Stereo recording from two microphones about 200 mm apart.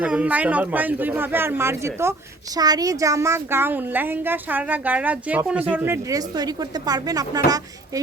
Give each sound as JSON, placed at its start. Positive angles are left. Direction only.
{"t": 0.0, "sound": "a woman's voice", "side_deg": -5}